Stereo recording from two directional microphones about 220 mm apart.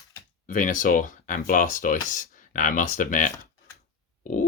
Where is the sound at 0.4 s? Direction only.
35° left (ahead or behind).